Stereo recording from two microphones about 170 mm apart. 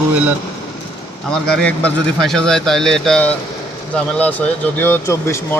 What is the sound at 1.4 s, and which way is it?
A man's voice, 5° left (ahead or behind).